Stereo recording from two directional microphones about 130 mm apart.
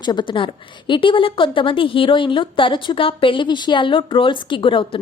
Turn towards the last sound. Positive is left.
turn(degrees=40)  # may be behind; listen again after turning